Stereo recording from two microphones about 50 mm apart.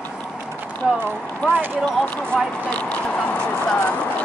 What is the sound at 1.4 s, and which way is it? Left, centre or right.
Speech, left.